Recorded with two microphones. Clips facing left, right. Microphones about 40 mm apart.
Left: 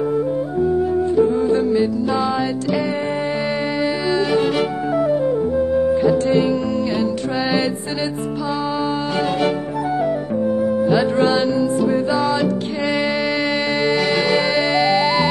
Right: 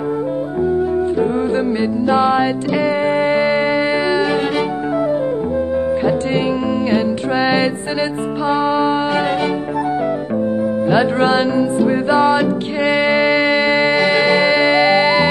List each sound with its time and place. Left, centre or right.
1.6 s music: right
6.0 s music: right
10.9 s music: right